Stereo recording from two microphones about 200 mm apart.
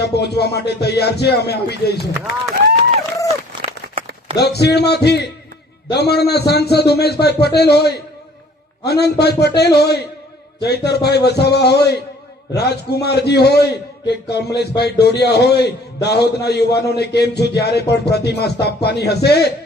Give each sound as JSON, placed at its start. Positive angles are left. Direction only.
{"t": 0.0, "sound": "a man's voice", "side_deg": 55}
{"t": 3.2, "sound": "a sound", "side_deg": -30}
{"t": 4.4, "sound": "a man's voice", "side_deg": 55}